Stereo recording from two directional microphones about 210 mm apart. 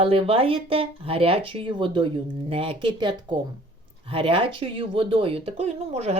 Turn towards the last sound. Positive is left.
turn(degrees=-30)  # may be behind; listen again after turning